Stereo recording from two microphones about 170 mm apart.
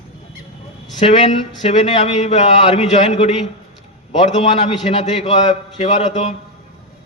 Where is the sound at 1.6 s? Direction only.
40° left (ahead or behind).